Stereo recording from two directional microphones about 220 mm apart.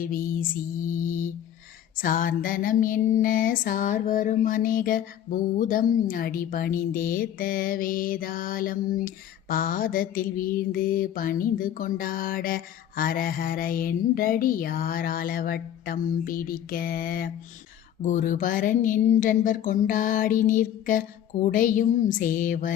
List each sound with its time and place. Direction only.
0.0 s mantra: 40° left (ahead or behind)